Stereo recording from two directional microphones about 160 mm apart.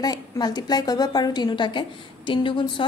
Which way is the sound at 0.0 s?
25° left (ahead or behind).